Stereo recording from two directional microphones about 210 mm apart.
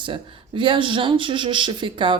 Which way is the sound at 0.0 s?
25° right (ahead or behind).